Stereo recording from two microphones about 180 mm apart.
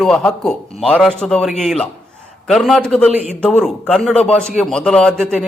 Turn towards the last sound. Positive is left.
turn(degrees=5)  # may be behind; listen again after turning